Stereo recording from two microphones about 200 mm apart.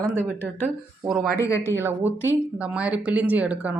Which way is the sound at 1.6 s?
10° right (ahead or behind).